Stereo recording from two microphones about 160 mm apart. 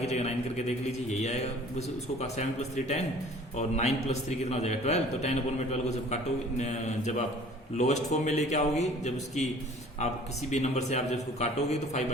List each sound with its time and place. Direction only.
0.0 s a man's voice: 40° left (ahead or behind)
10.5 s a man's voice: 45° left (ahead or behind)